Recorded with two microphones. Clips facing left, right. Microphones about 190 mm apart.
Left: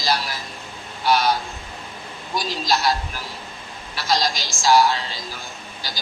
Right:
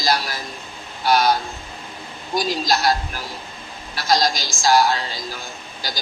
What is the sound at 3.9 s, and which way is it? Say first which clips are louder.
A woman's voice: right 3 dB; 40° right (ahead or behind).